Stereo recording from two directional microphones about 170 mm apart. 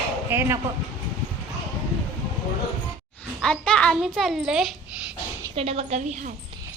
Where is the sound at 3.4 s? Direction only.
5° left (ahead or behind).